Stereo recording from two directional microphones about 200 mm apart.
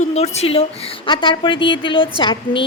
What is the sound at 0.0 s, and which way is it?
A woman's voice, 30° left (ahead or behind).